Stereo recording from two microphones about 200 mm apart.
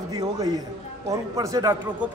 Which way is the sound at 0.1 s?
20° right (ahead or behind).